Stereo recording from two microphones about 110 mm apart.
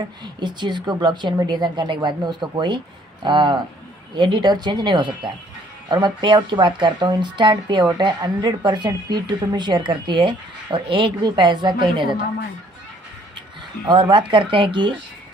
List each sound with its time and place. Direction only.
0.2 s speech: 45° right (ahead or behind)
13.8 s speech: 45° right (ahead or behind)